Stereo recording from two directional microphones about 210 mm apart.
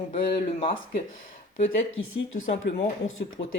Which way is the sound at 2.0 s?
75° left (ahead or behind).